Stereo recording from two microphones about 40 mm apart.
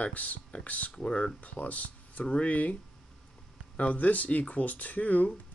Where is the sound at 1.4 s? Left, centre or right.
Left.